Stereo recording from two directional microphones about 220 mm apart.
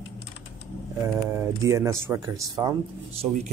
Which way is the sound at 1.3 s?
15° right (ahead or behind).